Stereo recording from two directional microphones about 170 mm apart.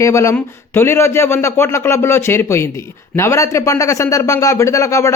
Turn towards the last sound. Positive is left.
turn(degrees=15)  # may be behind; listen again after turning